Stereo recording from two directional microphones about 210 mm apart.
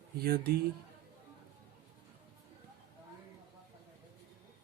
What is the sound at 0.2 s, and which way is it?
Speech, 45° right (ahead or behind).